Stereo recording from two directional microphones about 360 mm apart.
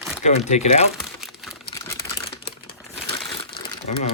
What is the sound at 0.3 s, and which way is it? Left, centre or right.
Speech, centre.